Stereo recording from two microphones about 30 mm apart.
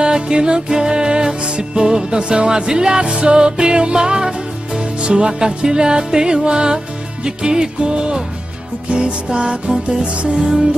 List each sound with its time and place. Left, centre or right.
0.0 s music: right